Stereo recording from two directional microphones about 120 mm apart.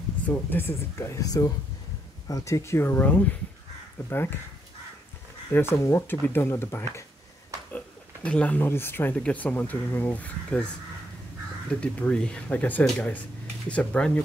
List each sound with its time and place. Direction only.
0.3 s speech: 15° left (ahead or behind)
5.5 s speech: 20° left (ahead or behind)
7.7 s speech: 10° left (ahead or behind)
11.8 s speech: 10° left (ahead or behind)